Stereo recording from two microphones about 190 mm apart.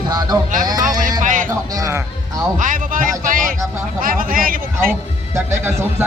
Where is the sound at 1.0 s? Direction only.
45° right (ahead or behind).